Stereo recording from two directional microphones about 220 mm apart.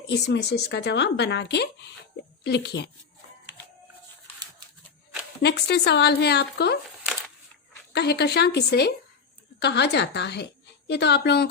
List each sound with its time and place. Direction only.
0.1 s speech: 50° left (ahead or behind)
5.4 s speech: 50° left (ahead or behind)
7.9 s a woman's voice: 50° left (ahead or behind)